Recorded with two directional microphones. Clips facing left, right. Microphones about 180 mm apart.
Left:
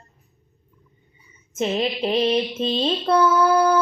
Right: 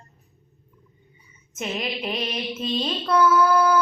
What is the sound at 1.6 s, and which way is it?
Mantra, 30° left (ahead or behind).